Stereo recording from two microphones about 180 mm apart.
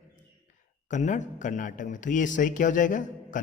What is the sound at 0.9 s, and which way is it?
Speech, 45° left (ahead or behind).